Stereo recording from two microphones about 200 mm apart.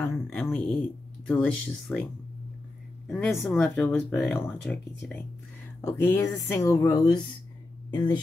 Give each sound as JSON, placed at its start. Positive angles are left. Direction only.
{"t": 0.0, "sound": "a sound", "side_deg": 5}
{"t": 1.2, "sound": "speech", "side_deg": 5}
{"t": 3.1, "sound": "speech", "side_deg": 5}
{"t": 5.8, "sound": "speech", "side_deg": 15}